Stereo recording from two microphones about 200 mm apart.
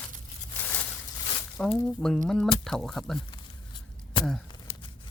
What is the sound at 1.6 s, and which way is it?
Speech, 5° left (ahead or behind).